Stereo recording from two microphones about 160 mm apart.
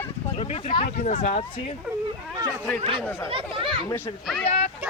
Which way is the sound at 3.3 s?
35° right (ahead or behind).